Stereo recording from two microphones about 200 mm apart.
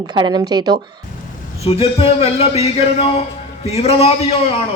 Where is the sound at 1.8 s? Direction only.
30° left (ahead or behind).